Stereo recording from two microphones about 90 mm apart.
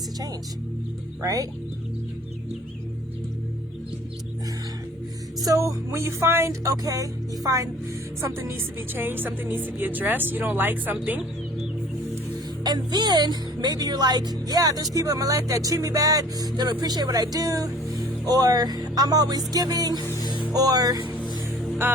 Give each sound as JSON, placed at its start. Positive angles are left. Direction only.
{"t": 1.2, "sound": "music", "side_deg": -40}
{"t": 5.4, "sound": "music", "side_deg": -40}
{"t": 8.2, "sound": "speech", "side_deg": -30}
{"t": 12.6, "sound": "speech", "side_deg": -50}
{"t": 14.9, "sound": "music", "side_deg": -40}
{"t": 16.6, "sound": "speech", "side_deg": -50}
{"t": 20.2, "sound": "music", "side_deg": 65}
{"t": 20.5, "sound": "speech", "side_deg": -45}
{"t": 21.8, "sound": "music", "side_deg": -25}